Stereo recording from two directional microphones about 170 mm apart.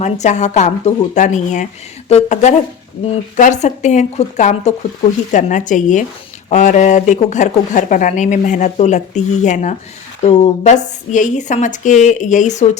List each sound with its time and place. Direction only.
0.0 s speech: 45° left (ahead or behind)